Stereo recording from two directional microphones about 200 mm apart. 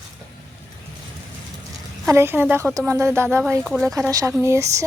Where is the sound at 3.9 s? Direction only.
15° right (ahead or behind).